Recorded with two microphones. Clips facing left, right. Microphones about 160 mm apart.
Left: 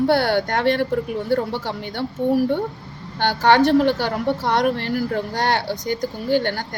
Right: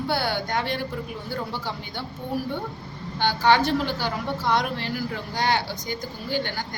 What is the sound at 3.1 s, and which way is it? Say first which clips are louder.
A woman's voice: left 4 dB; 65° left (ahead or behind).